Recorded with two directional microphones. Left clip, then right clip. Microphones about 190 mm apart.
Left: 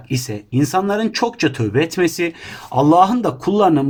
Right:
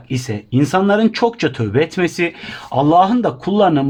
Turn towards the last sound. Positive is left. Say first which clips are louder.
# even
turn(degrees=-35)  # may be behind; listen again after turning